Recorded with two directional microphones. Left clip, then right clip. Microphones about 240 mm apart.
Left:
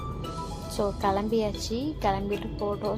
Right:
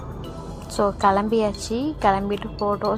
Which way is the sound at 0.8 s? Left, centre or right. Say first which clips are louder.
Right 8 dB; centre.